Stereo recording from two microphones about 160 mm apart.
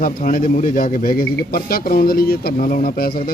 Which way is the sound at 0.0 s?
60° left (ahead or behind).